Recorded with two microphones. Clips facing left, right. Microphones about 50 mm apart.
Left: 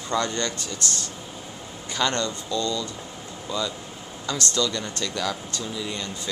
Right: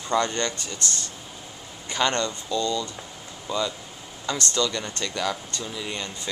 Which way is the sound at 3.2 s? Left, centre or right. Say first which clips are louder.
Left 3 dB; centre.